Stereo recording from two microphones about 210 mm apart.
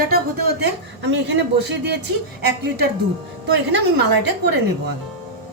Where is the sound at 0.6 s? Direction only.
55° right (ahead or behind).